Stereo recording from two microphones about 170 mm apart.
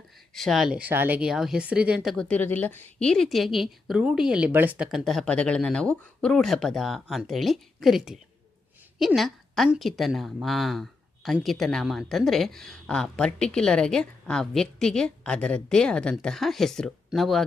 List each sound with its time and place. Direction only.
0.3 s a woman's voice: centre (ahead or behind)